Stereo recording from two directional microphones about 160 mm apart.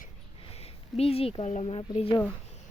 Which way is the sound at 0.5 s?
40° left (ahead or behind).